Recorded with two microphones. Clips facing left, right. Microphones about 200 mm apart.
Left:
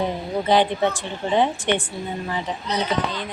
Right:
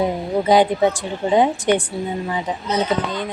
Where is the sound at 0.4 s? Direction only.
15° right (ahead or behind).